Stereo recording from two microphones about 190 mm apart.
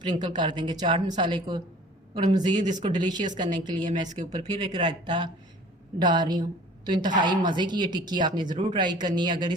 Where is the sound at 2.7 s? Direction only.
25° right (ahead or behind).